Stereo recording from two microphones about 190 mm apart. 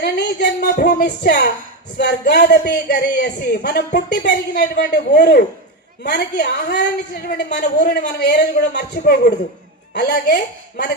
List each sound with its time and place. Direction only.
0.0 s speech: 60° left (ahead or behind)
9.0 s a woman's voice: 50° left (ahead or behind)